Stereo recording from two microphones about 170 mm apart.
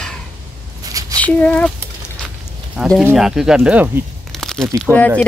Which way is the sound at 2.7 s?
Centre (ahead or behind).